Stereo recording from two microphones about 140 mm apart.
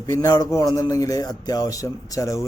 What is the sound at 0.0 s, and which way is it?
A man's voice, 25° left (ahead or behind).